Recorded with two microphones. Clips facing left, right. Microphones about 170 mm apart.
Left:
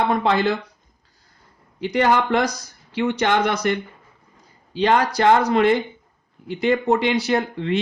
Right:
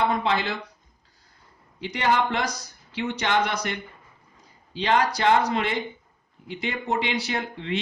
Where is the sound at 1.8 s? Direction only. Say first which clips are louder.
Left 5 dB; 50° left (ahead or behind).